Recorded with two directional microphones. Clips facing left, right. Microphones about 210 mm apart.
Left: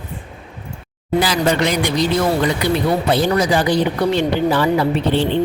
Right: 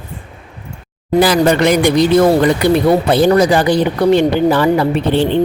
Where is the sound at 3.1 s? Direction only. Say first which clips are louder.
Right 4 dB; 50° right (ahead or behind).